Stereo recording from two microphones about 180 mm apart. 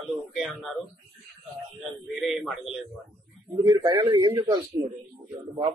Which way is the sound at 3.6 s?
20° right (ahead or behind).